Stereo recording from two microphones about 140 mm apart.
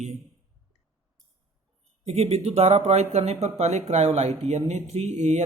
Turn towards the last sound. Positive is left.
turn(degrees=-55)  # may be behind; listen again after turning